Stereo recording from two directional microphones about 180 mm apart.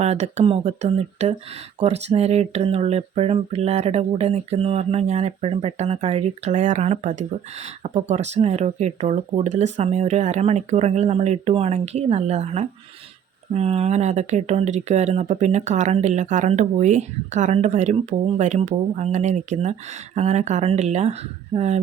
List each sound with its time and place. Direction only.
0.0 s speech: 40° right (ahead or behind)